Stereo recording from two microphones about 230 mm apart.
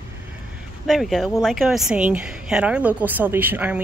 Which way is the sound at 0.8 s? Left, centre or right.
Centre.